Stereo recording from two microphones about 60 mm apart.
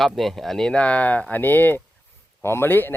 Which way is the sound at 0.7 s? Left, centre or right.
Left.